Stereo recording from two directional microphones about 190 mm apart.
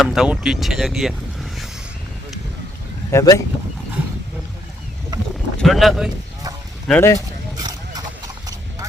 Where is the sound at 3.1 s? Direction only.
20° left (ahead or behind).